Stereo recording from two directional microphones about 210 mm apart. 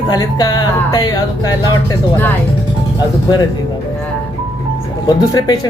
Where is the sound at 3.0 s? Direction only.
20° left (ahead or behind).